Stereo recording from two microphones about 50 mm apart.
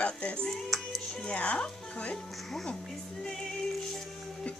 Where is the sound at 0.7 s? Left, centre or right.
Centre.